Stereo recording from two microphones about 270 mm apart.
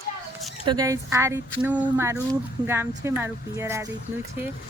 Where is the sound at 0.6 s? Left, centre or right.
Centre.